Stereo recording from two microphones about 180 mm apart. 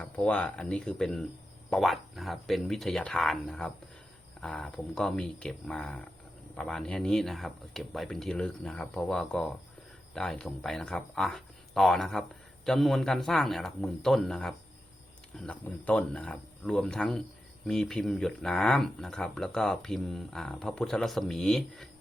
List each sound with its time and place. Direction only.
0.0 s speech: 5° left (ahead or behind)